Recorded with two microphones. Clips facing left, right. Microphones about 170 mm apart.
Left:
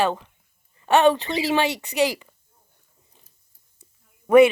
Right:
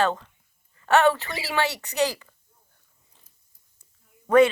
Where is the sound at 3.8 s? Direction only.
10° left (ahead or behind).